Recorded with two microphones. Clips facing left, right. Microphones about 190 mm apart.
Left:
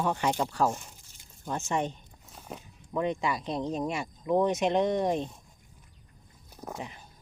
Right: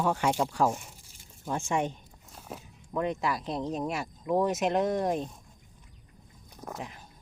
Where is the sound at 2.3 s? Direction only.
Centre (ahead or behind).